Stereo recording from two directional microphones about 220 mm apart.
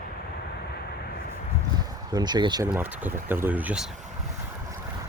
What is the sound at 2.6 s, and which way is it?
Speech, 10° right (ahead or behind).